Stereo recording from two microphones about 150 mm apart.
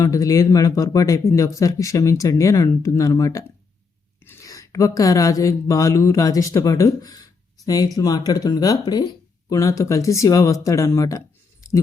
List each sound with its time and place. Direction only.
0.0 s speech: 20° left (ahead or behind)